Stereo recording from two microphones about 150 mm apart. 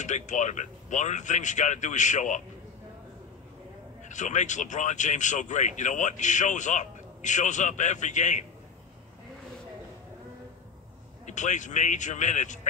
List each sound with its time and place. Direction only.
0.0 s speech: 55° left (ahead or behind)
4.1 s speech: 55° left (ahead or behind)
11.2 s speech: 55° left (ahead or behind)